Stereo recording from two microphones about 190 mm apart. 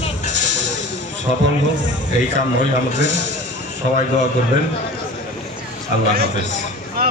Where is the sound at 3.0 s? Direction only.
70° right (ahead or behind).